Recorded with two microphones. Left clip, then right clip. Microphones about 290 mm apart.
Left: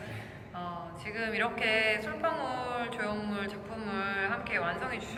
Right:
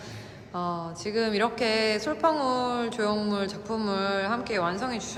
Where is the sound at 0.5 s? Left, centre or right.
Centre.